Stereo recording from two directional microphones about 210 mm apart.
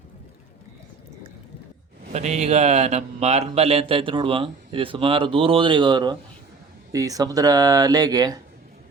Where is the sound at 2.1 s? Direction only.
30° right (ahead or behind).